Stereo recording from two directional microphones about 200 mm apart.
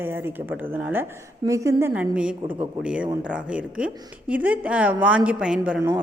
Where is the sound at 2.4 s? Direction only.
25° right (ahead or behind).